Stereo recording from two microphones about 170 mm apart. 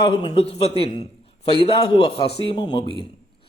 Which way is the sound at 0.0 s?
30° left (ahead or behind).